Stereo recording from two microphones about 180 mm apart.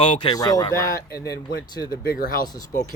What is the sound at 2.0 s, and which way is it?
Speech, 55° left (ahead or behind).